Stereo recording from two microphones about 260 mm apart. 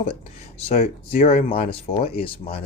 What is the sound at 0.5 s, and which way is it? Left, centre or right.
Speech, left.